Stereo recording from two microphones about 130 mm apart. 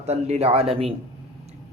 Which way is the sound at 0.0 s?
55° right (ahead or behind).